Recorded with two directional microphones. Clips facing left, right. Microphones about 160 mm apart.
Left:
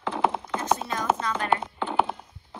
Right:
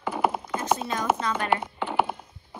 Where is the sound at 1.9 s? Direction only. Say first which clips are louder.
Even; 10° right (ahead or behind).